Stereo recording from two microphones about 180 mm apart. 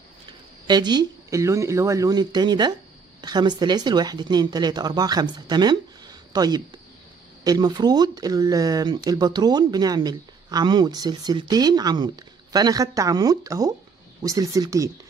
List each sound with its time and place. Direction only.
0.7 s speech: 25° right (ahead or behind)